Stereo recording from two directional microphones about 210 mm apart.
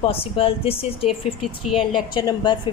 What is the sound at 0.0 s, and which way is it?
A woman's voice, 25° left (ahead or behind).